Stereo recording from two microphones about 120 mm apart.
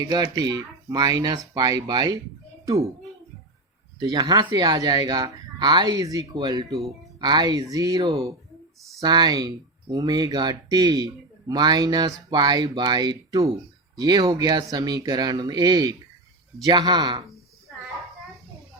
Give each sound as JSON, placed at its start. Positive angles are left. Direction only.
{"t": 0.0, "sound": "a child's voice", "side_deg": -35}
{"t": 4.0, "sound": "speech", "side_deg": -30}